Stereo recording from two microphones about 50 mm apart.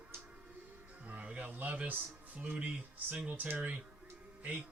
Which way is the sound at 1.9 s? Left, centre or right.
Right.